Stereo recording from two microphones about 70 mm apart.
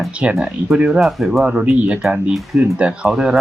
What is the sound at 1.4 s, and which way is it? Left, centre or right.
Speech, centre.